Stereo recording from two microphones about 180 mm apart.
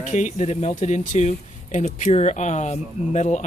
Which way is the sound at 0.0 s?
40° left (ahead or behind).